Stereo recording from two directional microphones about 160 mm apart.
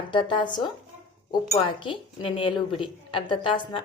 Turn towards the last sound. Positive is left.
turn(degrees=30)  # may be behind; listen again after turning